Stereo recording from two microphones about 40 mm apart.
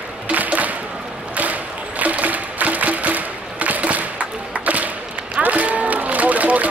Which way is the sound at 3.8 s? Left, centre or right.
Right.